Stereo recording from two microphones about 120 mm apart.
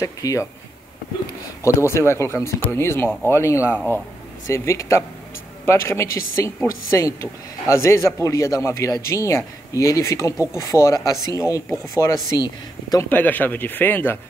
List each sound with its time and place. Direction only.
0.0 s speech: 25° left (ahead or behind)
1.9 s speech: 20° left (ahead or behind)
13.1 s speech: 15° left (ahead or behind)